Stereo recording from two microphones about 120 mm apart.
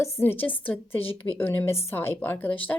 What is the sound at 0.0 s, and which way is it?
Speech, 20° left (ahead or behind).